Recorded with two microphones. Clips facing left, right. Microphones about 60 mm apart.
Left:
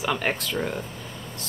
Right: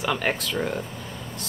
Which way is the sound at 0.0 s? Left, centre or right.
Centre.